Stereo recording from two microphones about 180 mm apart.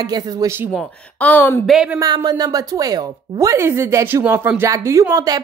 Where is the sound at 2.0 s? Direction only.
20° right (ahead or behind).